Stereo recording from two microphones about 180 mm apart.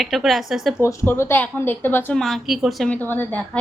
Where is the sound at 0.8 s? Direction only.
15° left (ahead or behind).